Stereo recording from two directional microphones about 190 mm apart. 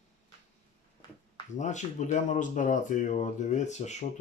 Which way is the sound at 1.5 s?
40° left (ahead or behind).